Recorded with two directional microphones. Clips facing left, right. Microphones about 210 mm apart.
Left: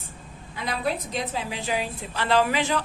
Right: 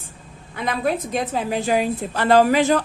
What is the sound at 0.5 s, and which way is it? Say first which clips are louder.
A woman's voice: right 5 dB; 55° right (ahead or behind).